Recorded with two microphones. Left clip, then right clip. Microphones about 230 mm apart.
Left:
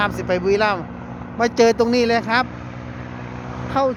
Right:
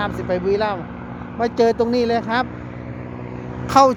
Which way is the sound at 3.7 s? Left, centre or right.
Right.